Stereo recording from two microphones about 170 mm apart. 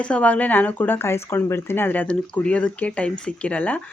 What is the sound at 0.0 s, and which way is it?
Speech, 5° left (ahead or behind).